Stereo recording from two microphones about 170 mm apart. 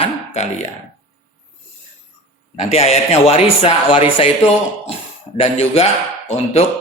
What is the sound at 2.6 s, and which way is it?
Speech, 35° left (ahead or behind).